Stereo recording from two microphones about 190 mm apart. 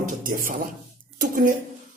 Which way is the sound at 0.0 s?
45° right (ahead or behind).